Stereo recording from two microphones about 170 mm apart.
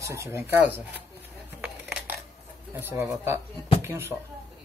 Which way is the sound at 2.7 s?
15° right (ahead or behind).